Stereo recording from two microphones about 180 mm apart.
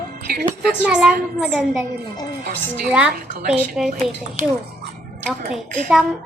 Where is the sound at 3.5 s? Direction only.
5° right (ahead or behind).